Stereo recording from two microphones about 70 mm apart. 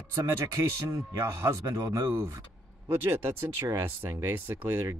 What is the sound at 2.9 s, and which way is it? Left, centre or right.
Speech, right.